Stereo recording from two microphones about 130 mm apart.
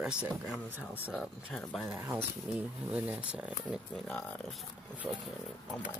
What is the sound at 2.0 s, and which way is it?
Speech, 20° right (ahead or behind).